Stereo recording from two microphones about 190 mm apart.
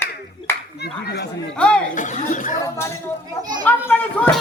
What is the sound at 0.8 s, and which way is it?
Speech, 60° left (ahead or behind).